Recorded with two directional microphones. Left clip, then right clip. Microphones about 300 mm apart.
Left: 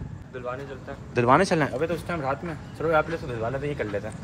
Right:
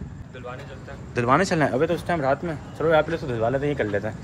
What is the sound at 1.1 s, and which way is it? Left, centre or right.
Speech, centre.